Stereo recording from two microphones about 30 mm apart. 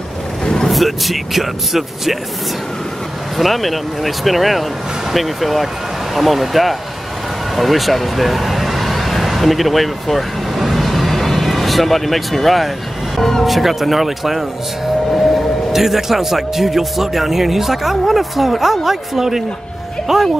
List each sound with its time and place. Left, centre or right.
0.4 s vehicle: left
0.7 s speech: centre
3.3 s speech: centre
7.5 s a sound: centre
13.2 s speech: centre
13.5 s speech: centre
15.7 s a man's voice: centre